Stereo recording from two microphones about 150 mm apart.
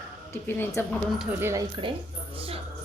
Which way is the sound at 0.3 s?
15° left (ahead or behind).